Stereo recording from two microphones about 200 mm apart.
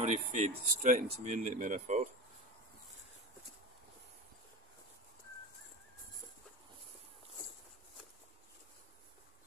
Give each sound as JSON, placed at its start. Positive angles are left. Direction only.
{"t": 0.0, "sound": "speech", "side_deg": -35}